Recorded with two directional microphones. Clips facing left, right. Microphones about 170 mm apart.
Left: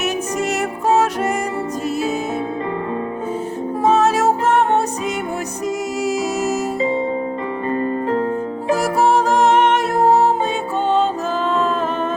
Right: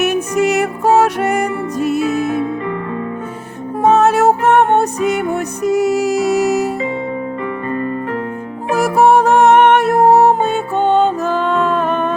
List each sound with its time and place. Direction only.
0.0 s music: 65° right (ahead or behind)
3.8 s music: 60° right (ahead or behind)
7.7 s music: 30° left (ahead or behind)
9.0 s music: 60° right (ahead or behind)